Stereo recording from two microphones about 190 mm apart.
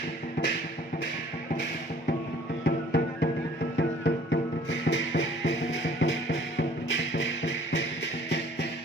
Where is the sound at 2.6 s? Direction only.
65° left (ahead or behind).